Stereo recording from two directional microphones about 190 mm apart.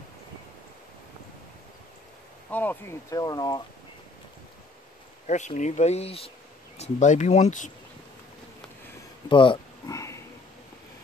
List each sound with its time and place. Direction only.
2.5 s speech: 10° left (ahead or behind)
5.2 s speech: 40° left (ahead or behind)
9.3 s a sound: 25° left (ahead or behind)